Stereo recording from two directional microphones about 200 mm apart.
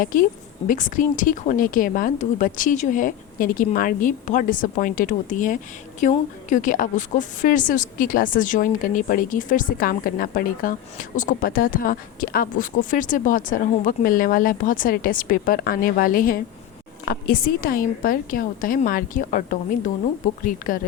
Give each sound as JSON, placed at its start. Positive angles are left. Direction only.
{"t": 0.0, "sound": "a woman's voice", "side_deg": 40}